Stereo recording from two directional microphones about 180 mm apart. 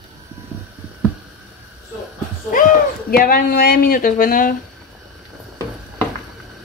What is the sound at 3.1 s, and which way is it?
Speech, 55° left (ahead or behind).